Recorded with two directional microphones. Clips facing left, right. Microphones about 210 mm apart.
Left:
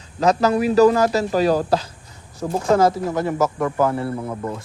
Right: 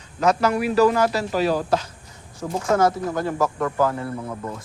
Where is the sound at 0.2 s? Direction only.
35° left (ahead or behind).